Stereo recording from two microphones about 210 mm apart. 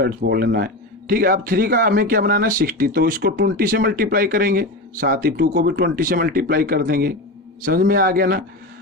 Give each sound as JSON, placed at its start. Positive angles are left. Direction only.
{"t": 0.0, "sound": "speech", "side_deg": -45}